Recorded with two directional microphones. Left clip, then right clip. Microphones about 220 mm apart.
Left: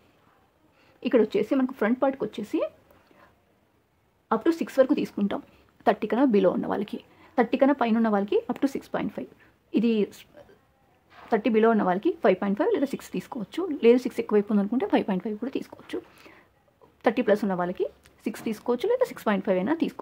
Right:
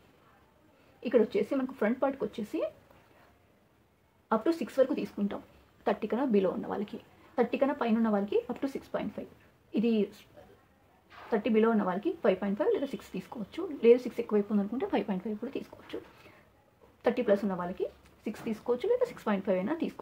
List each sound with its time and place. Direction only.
1.0 s speech: 45° left (ahead or behind)
4.3 s speech: 45° left (ahead or behind)
11.2 s speech: 45° left (ahead or behind)
17.0 s speech: 45° left (ahead or behind)